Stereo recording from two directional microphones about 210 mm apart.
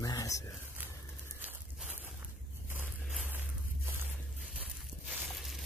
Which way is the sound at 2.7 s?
10° right (ahead or behind).